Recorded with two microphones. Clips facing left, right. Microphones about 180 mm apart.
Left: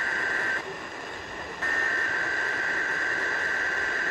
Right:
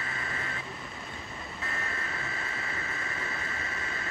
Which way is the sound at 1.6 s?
70° left (ahead or behind).